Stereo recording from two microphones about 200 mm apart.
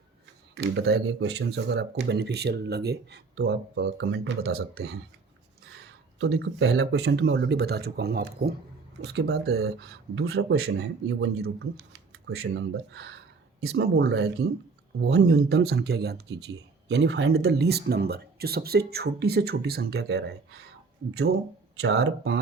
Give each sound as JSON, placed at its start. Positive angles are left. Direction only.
{"t": 0.5, "sound": "speech", "side_deg": -55}
{"t": 6.1, "sound": "speech", "side_deg": -60}
{"t": 11.2, "sound": "speech", "side_deg": -90}